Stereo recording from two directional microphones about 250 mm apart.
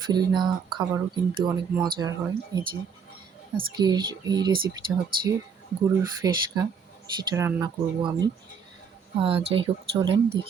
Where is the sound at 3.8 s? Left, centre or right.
Centre.